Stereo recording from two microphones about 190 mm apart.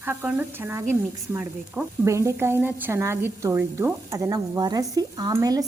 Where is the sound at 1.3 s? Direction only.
10° right (ahead or behind).